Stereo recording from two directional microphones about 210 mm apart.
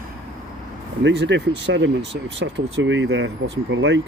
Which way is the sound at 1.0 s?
55° right (ahead or behind).